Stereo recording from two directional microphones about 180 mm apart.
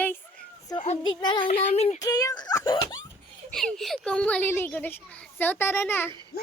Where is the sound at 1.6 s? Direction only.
35° left (ahead or behind).